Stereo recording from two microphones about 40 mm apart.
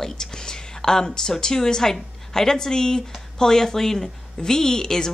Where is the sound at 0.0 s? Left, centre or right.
Centre.